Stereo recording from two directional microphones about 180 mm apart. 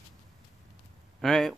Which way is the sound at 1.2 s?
Centre (ahead or behind).